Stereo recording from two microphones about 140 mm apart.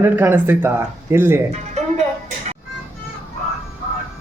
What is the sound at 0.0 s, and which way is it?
Speech, 15° right (ahead or behind).